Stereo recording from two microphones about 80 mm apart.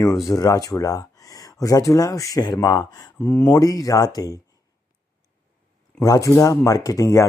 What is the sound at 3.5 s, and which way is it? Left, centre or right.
Speech, left.